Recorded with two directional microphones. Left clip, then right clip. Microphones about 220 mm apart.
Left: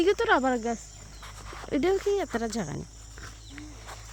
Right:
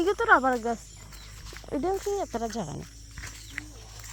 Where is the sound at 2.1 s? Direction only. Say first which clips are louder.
Left 2 dB; 20° left (ahead or behind).